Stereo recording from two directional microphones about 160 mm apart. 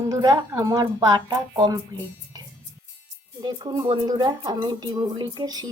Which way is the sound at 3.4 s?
25° right (ahead or behind).